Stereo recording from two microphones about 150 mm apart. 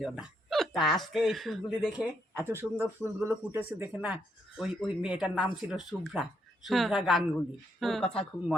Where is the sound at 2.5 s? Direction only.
15° right (ahead or behind).